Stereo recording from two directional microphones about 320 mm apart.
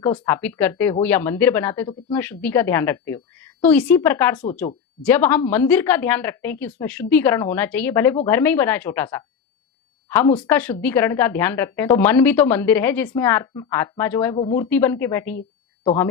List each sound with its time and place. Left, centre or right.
0.0 s a woman's voice: centre
10.3 s a woman's voice: centre